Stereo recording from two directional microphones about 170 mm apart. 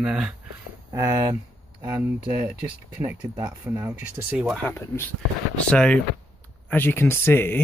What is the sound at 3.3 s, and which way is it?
Speech, 25° right (ahead or behind).